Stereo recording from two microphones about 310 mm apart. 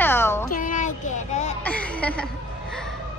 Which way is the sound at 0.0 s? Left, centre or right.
Centre.